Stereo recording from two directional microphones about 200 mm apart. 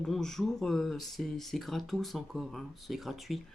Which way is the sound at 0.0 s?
Centre (ahead or behind).